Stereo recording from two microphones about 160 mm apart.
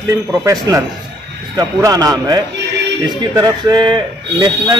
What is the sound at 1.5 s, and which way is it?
Speech, 20° right (ahead or behind).